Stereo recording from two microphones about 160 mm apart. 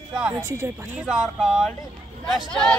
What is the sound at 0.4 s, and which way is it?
Speech, 20° right (ahead or behind).